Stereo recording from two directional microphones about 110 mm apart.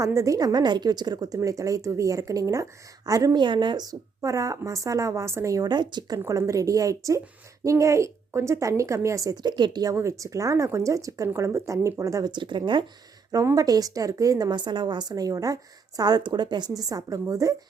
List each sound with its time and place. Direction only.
0.0 s a woman's voice: 30° right (ahead or behind)
3.4 s a woman's voice: 45° right (ahead or behind)
6.2 s a woman's voice: 30° right (ahead or behind)
9.9 s a woman's voice: 30° right (ahead or behind)
12.3 s speech: 45° right (ahead or behind)
13.3 s a woman's voice: 30° right (ahead or behind)